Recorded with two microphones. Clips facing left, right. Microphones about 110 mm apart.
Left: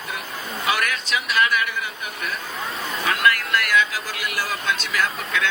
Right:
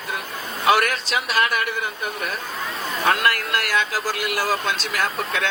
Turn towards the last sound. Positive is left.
turn(degrees=-35)  # may be behind; listen again after turning